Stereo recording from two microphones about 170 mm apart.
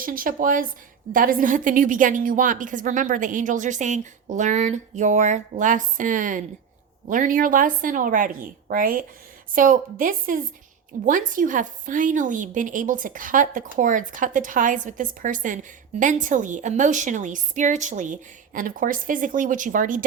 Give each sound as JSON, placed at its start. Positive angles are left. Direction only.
{"t": 0.0, "sound": "a woman's voice", "side_deg": -55}